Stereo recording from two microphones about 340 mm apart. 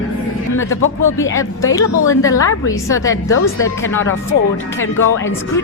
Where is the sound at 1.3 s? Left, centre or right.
Centre.